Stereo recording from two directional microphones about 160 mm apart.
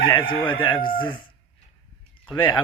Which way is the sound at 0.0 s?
30° left (ahead or behind).